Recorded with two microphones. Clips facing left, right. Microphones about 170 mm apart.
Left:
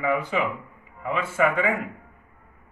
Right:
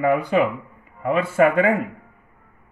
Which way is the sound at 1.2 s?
40° right (ahead or behind).